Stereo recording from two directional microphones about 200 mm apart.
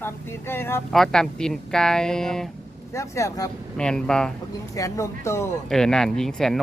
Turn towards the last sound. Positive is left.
turn(degrees=0)  # may be behind; listen again after turning